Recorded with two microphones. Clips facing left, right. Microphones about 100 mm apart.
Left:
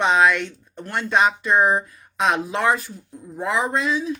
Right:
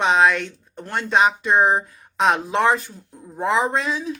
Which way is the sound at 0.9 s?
15° right (ahead or behind).